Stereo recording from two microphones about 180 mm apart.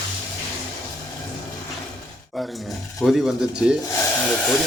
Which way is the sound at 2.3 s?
Centre (ahead or behind).